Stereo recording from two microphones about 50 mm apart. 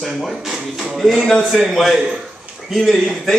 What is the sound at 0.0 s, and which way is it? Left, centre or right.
Speech, centre.